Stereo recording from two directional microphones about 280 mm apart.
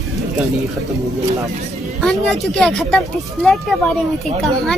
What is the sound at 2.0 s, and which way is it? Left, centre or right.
Speech, centre.